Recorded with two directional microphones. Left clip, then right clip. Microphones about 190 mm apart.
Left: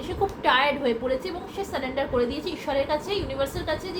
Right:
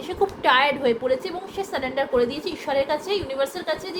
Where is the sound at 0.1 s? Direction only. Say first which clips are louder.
Right 3 dB; 45° right (ahead or behind).